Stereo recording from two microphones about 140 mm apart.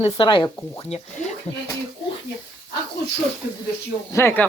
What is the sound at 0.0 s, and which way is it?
Speech, 35° left (ahead or behind).